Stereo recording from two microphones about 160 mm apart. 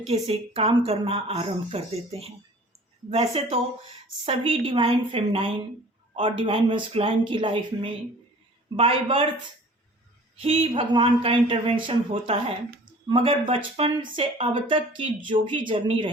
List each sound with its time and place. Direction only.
0.1 s speech: 40° right (ahead or behind)
10.4 s speech: 35° right (ahead or behind)